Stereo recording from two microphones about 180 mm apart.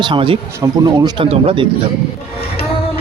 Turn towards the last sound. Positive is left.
turn(degrees=-30)  # may be behind; listen again after turning